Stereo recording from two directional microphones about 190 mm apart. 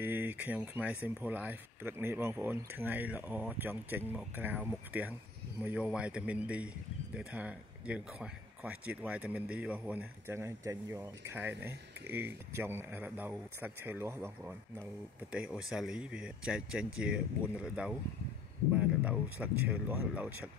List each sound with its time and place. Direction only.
0.0 s speech: 10° right (ahead or behind)